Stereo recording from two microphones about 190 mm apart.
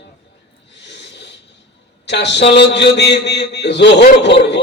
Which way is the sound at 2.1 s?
70° left (ahead or behind).